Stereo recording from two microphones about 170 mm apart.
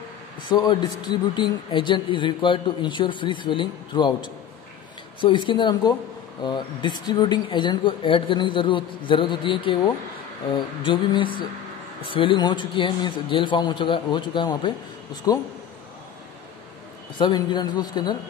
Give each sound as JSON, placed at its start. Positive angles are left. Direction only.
{"t": 0.4, "sound": "speech", "side_deg": 25}
{"t": 17.2, "sound": "speech", "side_deg": 25}